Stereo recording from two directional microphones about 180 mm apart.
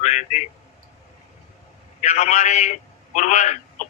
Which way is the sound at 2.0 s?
40° left (ahead or behind).